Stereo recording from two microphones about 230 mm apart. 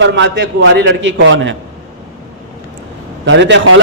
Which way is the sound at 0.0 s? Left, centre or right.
Right.